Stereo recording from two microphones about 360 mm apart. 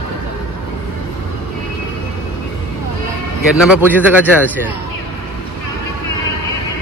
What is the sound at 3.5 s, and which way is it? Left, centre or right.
Speech, centre.